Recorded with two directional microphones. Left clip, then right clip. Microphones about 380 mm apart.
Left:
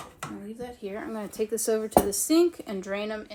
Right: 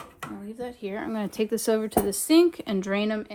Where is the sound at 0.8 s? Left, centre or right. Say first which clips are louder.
Right 3 dB; right.